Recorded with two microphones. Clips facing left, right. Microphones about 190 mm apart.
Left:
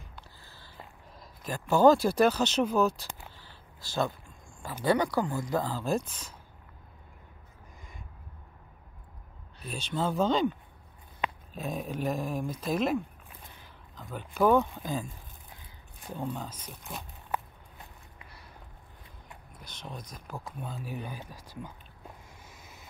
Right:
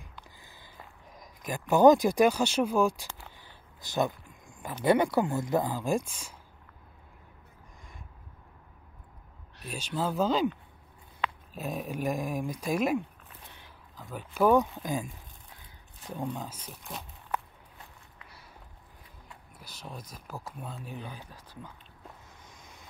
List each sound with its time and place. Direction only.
0.4 s a sound: 15° right (ahead or behind)
1.2 s speech: 15° right (ahead or behind)
3.3 s a sound: 20° right (ahead or behind)
4.8 s speech: 25° right (ahead or behind)
9.7 s speech: 10° right (ahead or behind)
11.5 s speech: 5° right (ahead or behind)
14.1 s speech: 10° right (ahead or behind)
16.6 s speech: 5° left (ahead or behind)
19.6 s speech: 5° right (ahead or behind); by 21.7 s 10° left (ahead or behind)
22.5 s vehicle: 5° left (ahead or behind)